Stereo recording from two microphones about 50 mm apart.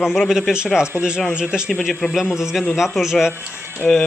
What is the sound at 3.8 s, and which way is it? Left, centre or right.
Speech, centre.